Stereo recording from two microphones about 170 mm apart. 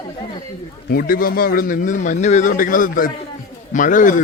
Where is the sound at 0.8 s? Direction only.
60° left (ahead or behind).